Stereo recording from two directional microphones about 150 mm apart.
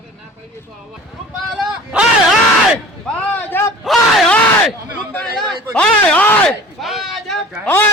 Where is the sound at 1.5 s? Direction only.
5° right (ahead or behind).